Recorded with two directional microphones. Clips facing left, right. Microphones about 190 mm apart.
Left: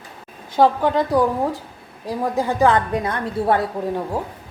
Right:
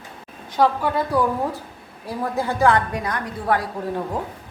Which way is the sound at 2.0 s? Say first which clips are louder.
Left 3 dB; 15° left (ahead or behind).